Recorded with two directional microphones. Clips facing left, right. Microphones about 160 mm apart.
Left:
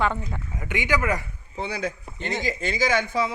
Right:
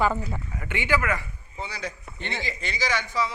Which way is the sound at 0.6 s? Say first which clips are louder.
Left 1 dB; 15° left (ahead or behind).